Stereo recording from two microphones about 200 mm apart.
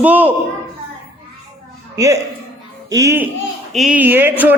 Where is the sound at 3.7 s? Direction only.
Centre (ahead or behind).